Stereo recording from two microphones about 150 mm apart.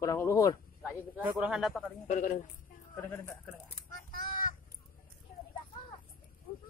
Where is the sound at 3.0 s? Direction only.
10° left (ahead or behind).